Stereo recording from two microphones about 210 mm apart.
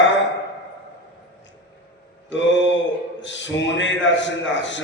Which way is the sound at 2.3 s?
60° left (ahead or behind).